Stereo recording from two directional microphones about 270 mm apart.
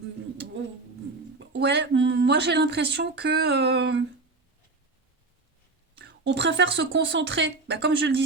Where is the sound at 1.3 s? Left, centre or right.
Right.